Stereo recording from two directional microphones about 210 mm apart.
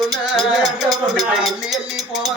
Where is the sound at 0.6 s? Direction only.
15° right (ahead or behind).